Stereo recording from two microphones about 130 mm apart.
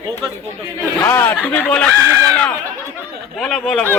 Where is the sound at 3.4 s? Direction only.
Centre (ahead or behind).